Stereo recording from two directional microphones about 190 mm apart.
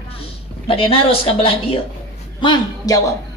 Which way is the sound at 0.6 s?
30° left (ahead or behind).